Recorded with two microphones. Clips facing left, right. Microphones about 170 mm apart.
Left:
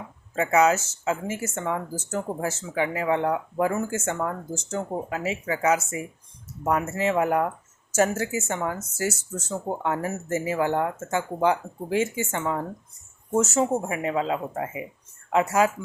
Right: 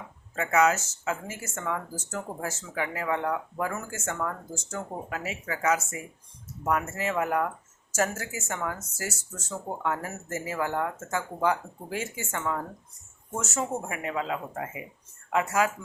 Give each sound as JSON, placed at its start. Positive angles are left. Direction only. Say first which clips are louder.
{"t": 0.3, "sound": "speech", "louder": "left 3 dB", "side_deg": 25}